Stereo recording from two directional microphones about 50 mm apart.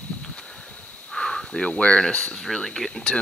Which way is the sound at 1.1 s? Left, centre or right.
Centre.